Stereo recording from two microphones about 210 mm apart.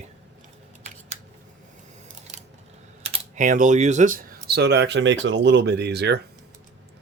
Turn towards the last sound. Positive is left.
turn(degrees=-50)  # may be behind; listen again after turning